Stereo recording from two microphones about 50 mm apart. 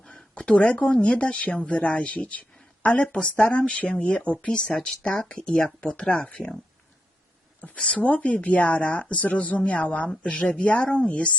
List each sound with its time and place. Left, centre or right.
0.0 s a sound: centre
1.0 s speech: left
4.4 s speech: centre
7.6 s speech: left